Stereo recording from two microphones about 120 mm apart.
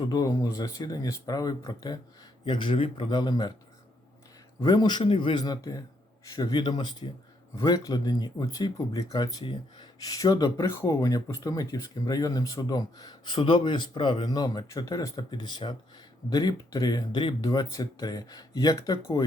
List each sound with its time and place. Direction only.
0.0 s speech: 30° left (ahead or behind)
4.6 s speech: 35° left (ahead or behind)